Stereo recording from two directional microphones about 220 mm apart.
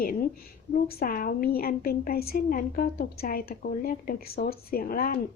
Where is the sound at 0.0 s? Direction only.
40° left (ahead or behind).